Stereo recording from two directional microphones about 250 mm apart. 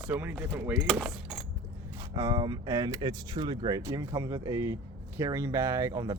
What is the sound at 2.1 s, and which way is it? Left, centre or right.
Speech, centre.